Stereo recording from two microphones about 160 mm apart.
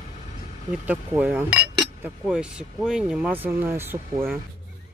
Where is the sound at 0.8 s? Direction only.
10° right (ahead or behind).